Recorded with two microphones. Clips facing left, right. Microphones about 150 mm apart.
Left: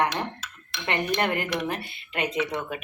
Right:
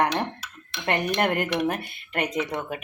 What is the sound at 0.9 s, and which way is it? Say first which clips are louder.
Speech: right 2 dB; 45° right (ahead or behind).